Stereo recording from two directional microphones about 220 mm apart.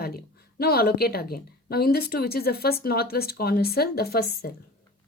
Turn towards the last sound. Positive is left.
turn(degrees=45)  # may be behind; listen again after turning